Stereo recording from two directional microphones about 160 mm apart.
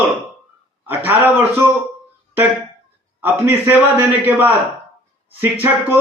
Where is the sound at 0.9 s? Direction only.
10° right (ahead or behind).